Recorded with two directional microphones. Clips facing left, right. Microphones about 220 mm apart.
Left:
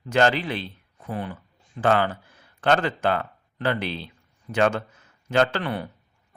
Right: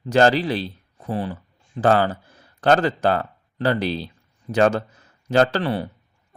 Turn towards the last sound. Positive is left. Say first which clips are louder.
# right 4 dB
turn(degrees=-30)  # may be behind; listen again after turning